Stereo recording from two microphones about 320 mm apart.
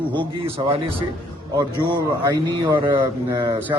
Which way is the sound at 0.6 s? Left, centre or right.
Centre.